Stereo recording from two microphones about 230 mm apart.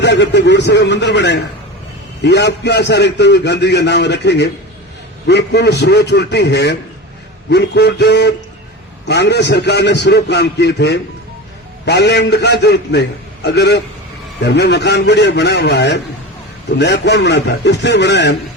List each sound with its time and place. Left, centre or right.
0.0 s a man's voice: left